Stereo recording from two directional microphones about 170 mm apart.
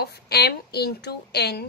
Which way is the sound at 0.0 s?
70° left (ahead or behind).